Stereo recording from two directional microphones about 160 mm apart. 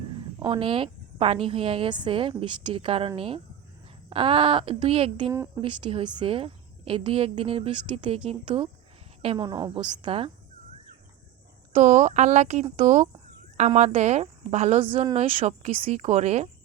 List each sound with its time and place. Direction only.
0.3 s a woman's voice: 30° right (ahead or behind)
5.3 s a woman's voice: 15° right (ahead or behind)
5.6 s a woman's voice: 30° right (ahead or behind)
11.7 s speech: 50° right (ahead or behind)